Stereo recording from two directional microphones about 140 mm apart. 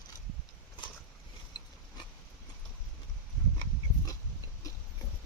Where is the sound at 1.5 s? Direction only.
30° left (ahead or behind).